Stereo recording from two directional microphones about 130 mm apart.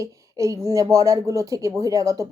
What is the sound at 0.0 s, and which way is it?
Speech, 25° right (ahead or behind).